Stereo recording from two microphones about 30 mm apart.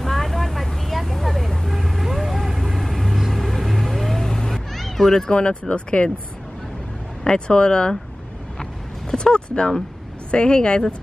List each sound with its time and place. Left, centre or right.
0.0 s vehicle: centre
4.2 s cat: centre
4.5 s children playing: centre
5.3 s speech: left
7.3 s speech: left
8.5 s a sound: left
10.3 s speech: left